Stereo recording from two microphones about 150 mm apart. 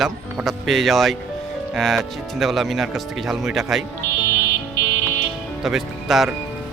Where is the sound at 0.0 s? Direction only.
Centre (ahead or behind).